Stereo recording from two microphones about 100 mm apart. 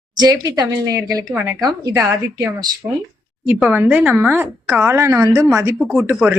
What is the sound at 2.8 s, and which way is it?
Speech, 30° right (ahead or behind).